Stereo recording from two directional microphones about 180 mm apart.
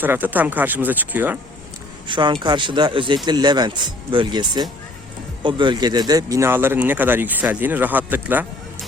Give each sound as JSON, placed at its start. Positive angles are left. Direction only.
{"t": 0.0, "sound": "speech", "side_deg": -10}
{"t": 2.0, "sound": "speech", "side_deg": -25}